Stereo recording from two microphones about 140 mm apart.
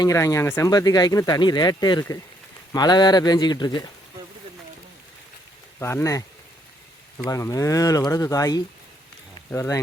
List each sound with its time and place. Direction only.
0.0 s speech: 25° left (ahead or behind)
5.8 s speech: 20° left (ahead or behind)
7.3 s speech: 25° left (ahead or behind)